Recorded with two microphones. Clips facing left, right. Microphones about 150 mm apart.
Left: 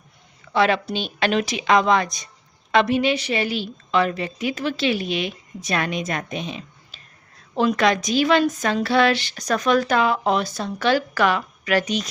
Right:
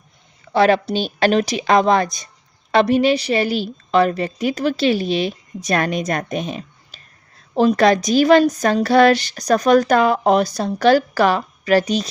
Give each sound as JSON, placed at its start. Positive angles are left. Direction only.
{"t": 0.5, "sound": "a woman's voice", "side_deg": -40}